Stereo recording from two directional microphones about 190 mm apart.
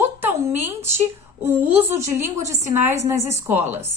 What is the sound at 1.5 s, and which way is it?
A woman's voice, 10° right (ahead or behind).